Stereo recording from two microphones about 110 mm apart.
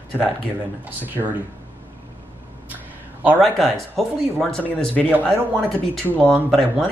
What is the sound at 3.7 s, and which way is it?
Speech, centre (ahead or behind).